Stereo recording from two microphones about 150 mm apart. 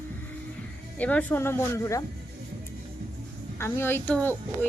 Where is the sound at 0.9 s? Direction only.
10° left (ahead or behind).